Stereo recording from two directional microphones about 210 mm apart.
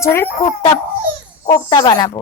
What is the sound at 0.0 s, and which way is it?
Speech, 10° left (ahead or behind).